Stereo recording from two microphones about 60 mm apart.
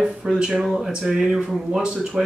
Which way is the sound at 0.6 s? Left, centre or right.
Centre.